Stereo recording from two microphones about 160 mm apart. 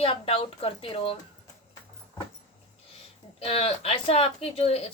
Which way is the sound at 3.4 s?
40° left (ahead or behind).